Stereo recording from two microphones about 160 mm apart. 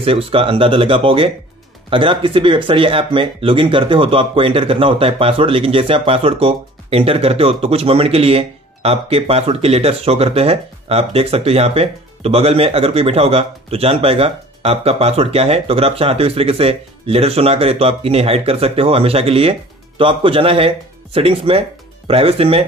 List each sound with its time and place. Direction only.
0.0 s speech: 35° right (ahead or behind)